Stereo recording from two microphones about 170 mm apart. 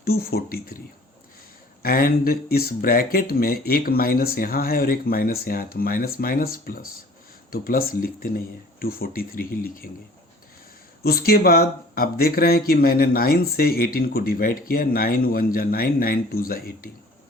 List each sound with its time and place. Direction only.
0.0 s speech: 65° left (ahead or behind)
1.8 s speech: 60° left (ahead or behind)
11.0 s speech: 60° left (ahead or behind)